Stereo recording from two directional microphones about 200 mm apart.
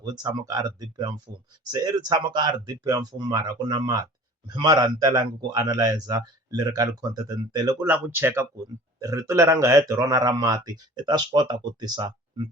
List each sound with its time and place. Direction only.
0.0 s a man's voice: 20° right (ahead or behind)
7.9 s speech: 10° right (ahead or behind)